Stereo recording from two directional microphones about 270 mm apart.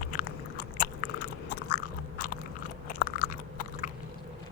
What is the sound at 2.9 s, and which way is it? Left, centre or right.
Chewing, left.